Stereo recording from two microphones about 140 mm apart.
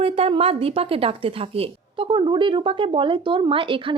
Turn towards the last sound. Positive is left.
turn(degrees=-35)  # may be behind; listen again after turning